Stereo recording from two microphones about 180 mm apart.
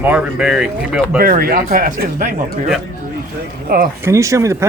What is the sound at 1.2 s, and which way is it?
Speech, 55° right (ahead or behind).